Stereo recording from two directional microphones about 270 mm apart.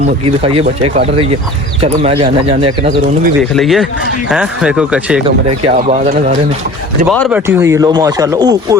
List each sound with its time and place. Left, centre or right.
0.3 s speech: right
3.5 s speech: centre
5.6 s speech: right
7.1 s speech: centre